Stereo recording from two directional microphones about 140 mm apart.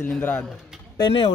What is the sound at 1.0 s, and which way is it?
Speech, 40° left (ahead or behind).